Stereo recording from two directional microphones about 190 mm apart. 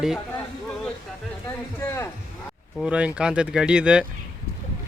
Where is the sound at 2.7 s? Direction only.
5° right (ahead or behind).